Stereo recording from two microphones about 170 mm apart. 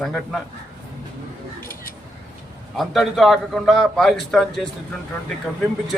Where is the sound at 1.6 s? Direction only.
55° left (ahead or behind).